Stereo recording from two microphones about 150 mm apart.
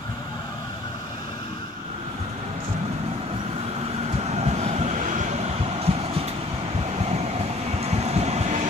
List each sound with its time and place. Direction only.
4.2 s vehicle: 45° right (ahead or behind)
7.8 s vehicle: 45° right (ahead or behind)